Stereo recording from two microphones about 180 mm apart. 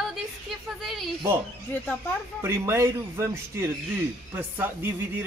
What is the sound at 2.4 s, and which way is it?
A man's voice, 15° right (ahead or behind).